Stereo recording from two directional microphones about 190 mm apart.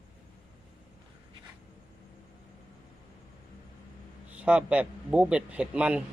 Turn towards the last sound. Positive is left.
turn(degrees=-5)  # may be behind; listen again after turning